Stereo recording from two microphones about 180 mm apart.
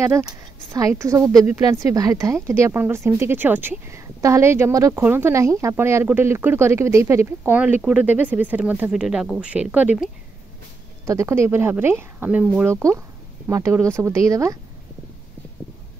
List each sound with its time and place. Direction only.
0.0 s a woman's voice: 15° right (ahead or behind)
11.1 s speech: 15° right (ahead or behind)